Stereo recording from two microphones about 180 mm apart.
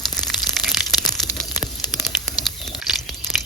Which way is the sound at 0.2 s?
Centre (ahead or behind).